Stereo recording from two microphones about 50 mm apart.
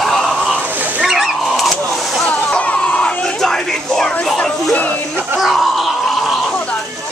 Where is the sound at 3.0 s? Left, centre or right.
Centre.